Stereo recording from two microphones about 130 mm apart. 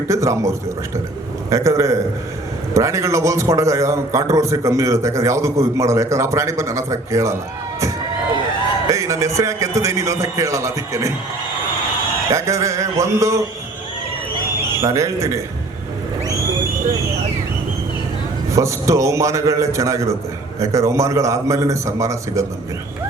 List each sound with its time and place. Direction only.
0.1 s a man's voice: 25° right (ahead or behind)
8.9 s a man's voice: 25° right (ahead or behind)
12.3 s a man's voice: 25° right (ahead or behind)
14.8 s a man's voice: 25° right (ahead or behind)
18.5 s a man's voice: 25° right (ahead or behind)